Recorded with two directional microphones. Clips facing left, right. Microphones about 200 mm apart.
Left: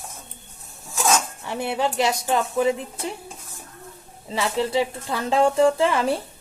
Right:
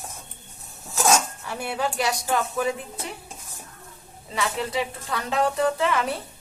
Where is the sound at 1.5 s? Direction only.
25° left (ahead or behind).